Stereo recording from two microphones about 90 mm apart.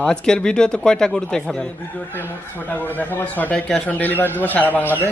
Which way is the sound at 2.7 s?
20° left (ahead or behind).